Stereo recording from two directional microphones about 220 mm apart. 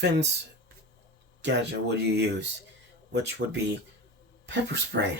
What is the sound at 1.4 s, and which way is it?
Speech, 50° right (ahead or behind).